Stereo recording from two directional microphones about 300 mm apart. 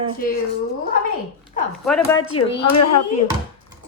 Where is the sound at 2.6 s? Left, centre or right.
Left.